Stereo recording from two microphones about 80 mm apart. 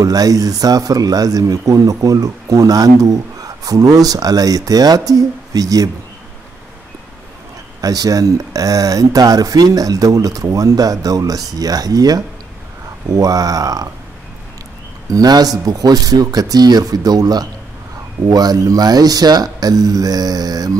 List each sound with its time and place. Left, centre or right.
0.0 s speech: right
7.8 s speech: right
15.0 s speech: right